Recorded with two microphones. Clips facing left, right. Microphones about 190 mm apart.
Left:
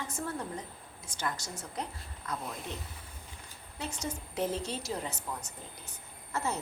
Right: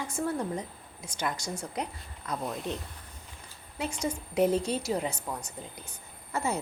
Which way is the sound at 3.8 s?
15° right (ahead or behind).